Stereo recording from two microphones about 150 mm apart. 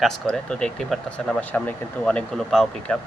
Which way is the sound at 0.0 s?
5° left (ahead or behind).